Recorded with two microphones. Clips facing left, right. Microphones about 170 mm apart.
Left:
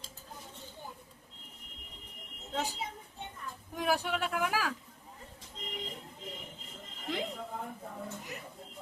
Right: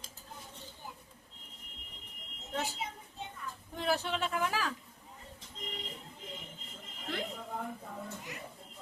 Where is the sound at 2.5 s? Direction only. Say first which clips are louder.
Left 1 dB; 15° left (ahead or behind).